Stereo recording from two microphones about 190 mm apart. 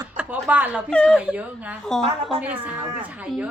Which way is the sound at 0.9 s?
5° left (ahead or behind).